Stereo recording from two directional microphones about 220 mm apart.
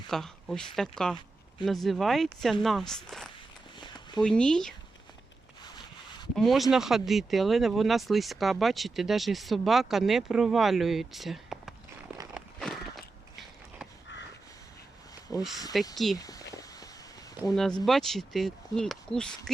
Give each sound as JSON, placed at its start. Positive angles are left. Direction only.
{"t": 0.1, "sound": "speech", "side_deg": 0}
{"t": 6.3, "sound": "speech", "side_deg": 0}
{"t": 12.3, "sound": "walk", "side_deg": 0}
{"t": 15.3, "sound": "a sound", "side_deg": -5}
{"t": 15.7, "sound": "speech", "side_deg": 0}
{"t": 16.1, "sound": "a sound", "side_deg": 15}
{"t": 17.5, "sound": "speech", "side_deg": 0}